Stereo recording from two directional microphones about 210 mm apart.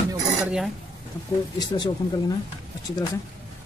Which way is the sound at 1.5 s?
20° left (ahead or behind).